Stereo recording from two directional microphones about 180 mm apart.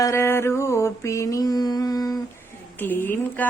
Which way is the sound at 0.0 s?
15° left (ahead or behind).